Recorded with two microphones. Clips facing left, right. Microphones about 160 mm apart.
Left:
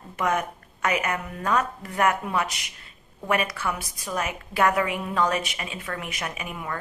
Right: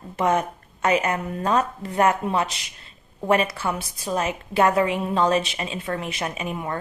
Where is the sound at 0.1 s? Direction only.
30° right (ahead or behind).